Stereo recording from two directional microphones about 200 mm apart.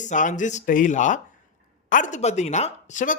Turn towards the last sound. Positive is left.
turn(degrees=35)  # may be behind; listen again after turning